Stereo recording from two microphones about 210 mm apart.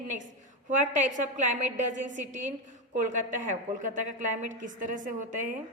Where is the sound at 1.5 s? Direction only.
35° right (ahead or behind).